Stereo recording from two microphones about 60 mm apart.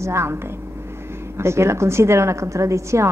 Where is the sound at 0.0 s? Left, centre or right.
Right.